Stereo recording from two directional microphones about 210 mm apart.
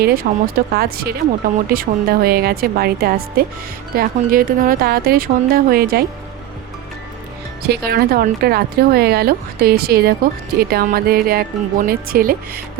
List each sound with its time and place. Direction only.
0.0 s a woman's voice: 45° right (ahead or behind)
7.7 s a woman's voice: 50° right (ahead or behind)